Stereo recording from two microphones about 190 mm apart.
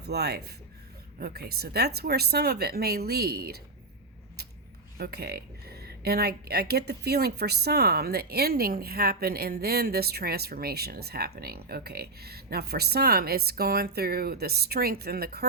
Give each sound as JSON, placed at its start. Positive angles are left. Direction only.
{"t": 0.0, "sound": "speech", "side_deg": -60}
{"t": 4.9, "sound": "speech", "side_deg": -55}